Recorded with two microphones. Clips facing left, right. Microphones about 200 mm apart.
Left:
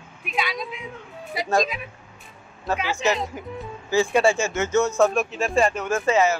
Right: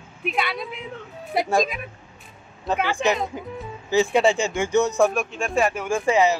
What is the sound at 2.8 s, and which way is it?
Speech, 55° right (ahead or behind).